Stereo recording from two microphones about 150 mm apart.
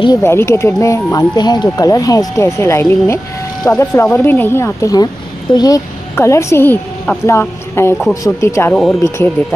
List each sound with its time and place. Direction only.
0.2 s speech: 15° left (ahead or behind)
8.7 s speech: centre (ahead or behind)